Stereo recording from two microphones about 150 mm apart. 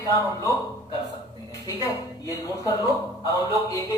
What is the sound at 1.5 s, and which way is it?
A man's voice, 20° left (ahead or behind).